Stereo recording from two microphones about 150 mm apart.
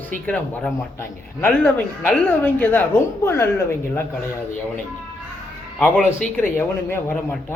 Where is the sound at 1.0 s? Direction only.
10° left (ahead or behind).